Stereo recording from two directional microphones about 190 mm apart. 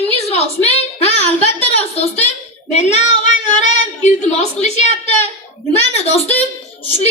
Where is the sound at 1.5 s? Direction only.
35° left (ahead or behind).